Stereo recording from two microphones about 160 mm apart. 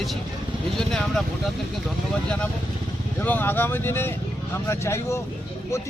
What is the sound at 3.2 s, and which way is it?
Speech, 10° left (ahead or behind).